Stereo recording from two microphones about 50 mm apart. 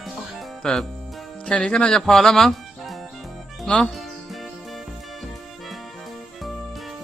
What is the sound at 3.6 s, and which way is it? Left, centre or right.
Speech, centre.